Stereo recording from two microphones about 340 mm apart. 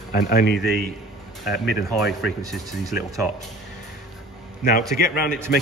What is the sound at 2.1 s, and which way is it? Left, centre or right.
Speech, left.